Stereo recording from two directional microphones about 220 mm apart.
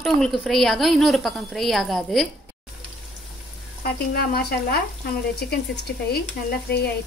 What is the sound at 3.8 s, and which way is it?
A woman's voice, 45° left (ahead or behind).